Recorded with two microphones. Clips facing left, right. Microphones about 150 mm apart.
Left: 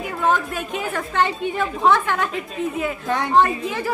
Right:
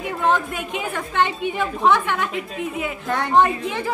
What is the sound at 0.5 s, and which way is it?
A woman's voice, 15° right (ahead or behind).